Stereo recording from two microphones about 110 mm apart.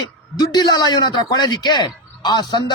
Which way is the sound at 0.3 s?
40° left (ahead or behind).